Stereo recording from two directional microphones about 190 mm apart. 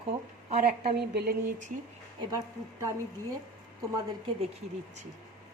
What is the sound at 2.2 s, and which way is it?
Speech, 20° right (ahead or behind).